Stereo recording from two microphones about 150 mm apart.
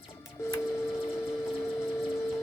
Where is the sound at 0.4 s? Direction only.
20° left (ahead or behind).